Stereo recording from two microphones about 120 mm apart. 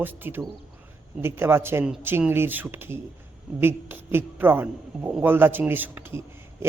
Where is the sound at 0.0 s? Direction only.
15° right (ahead or behind).